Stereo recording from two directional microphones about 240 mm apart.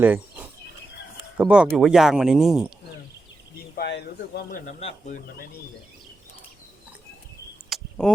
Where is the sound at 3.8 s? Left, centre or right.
Left.